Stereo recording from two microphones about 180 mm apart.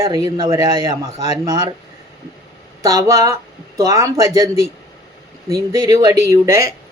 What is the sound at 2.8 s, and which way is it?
Speech, 20° right (ahead or behind).